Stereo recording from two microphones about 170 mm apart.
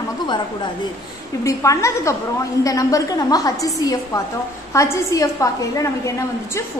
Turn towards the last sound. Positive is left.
turn(degrees=20)  # may be behind; listen again after turning